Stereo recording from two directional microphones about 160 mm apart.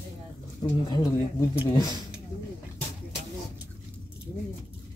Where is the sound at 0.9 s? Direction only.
25° left (ahead or behind).